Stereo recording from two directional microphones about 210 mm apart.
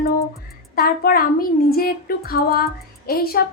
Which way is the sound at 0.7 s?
45° left (ahead or behind).